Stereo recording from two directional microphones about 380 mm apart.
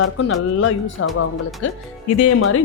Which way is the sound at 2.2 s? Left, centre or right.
Left.